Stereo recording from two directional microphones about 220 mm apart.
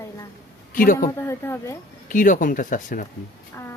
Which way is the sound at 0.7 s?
40° left (ahead or behind).